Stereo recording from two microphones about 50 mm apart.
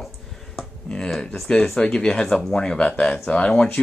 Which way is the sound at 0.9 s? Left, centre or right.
Centre.